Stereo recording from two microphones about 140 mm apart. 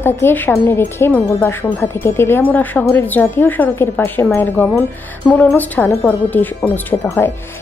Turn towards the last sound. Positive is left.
turn(degrees=15)  # may be behind; listen again after turning